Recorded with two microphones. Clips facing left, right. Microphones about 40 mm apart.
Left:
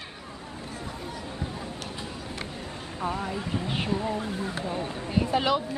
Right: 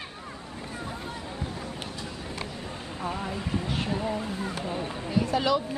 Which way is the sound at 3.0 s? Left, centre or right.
Centre.